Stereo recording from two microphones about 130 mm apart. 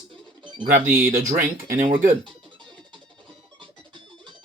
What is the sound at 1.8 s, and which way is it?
Speech, 80° right.